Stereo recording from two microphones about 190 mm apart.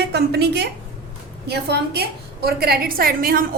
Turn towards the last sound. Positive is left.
turn(degrees=-50)  # may be behind; listen again after turning